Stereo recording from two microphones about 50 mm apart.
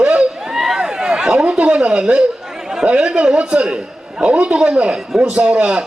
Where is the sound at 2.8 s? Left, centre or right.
Right.